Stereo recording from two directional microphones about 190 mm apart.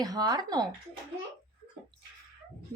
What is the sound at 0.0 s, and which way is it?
Speech, 20° right (ahead or behind).